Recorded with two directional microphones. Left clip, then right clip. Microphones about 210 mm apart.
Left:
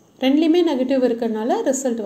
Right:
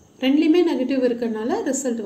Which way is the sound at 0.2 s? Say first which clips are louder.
Left 1 dB; 20° left (ahead or behind).